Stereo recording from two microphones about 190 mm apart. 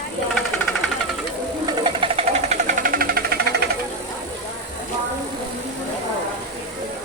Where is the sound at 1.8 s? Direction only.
30° right (ahead or behind); by 3.6 s 55° right (ahead or behind).